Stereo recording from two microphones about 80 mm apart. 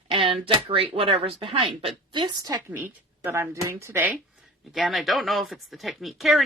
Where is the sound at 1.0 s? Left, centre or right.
Right.